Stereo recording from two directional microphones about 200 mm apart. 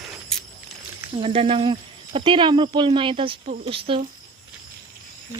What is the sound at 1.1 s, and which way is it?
Speech, 30° right (ahead or behind).